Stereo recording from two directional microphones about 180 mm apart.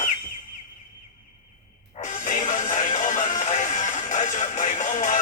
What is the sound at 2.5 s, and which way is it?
Music, 45° left (ahead or behind).